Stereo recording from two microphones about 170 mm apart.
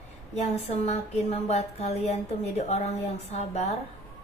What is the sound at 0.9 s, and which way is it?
A woman's voice, 40° left (ahead or behind).